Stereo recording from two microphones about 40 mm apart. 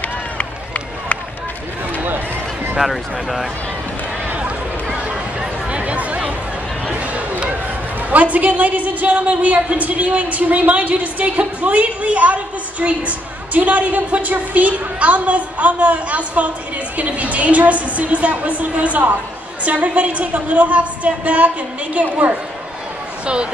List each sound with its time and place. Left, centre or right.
2.8 s speech: centre
5.7 s chatter: right
6.9 s a sound: right
8.1 s a woman's voice: right
23.2 s speech: right